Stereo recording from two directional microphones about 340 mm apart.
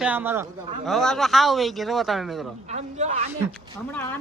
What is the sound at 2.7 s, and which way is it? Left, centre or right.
Speech, centre.